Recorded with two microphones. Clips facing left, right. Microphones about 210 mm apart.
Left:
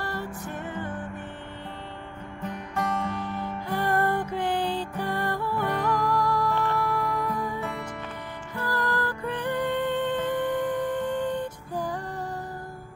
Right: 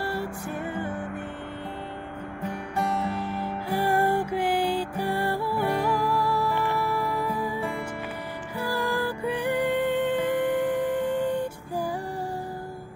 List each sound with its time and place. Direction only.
0.0 s music: 10° right (ahead or behind)
2.4 s music: 10° right (ahead or behind)